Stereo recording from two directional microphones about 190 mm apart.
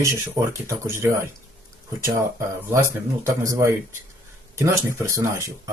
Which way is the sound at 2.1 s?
15° right (ahead or behind).